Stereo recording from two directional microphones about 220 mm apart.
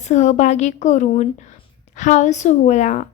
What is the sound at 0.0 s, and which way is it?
A woman's voice, 30° left (ahead or behind).